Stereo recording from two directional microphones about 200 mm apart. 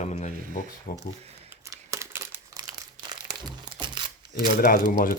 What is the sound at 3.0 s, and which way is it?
Crumpling, 20° right (ahead or behind).